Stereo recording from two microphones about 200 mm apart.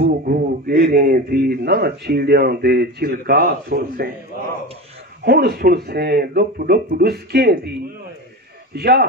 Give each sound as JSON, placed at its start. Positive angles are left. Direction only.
{"t": 0.2, "sound": "a man's voice", "side_deg": -45}
{"t": 5.2, "sound": "a man's voice", "side_deg": -50}
{"t": 8.7, "sound": "a man's voice", "side_deg": -50}